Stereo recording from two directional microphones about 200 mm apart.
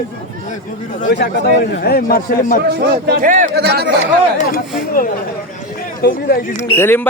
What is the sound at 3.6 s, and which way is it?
Speech, 55° right (ahead or behind).